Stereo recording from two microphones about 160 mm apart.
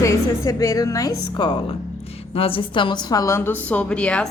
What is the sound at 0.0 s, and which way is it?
A woman's voice, 20° left (ahead or behind).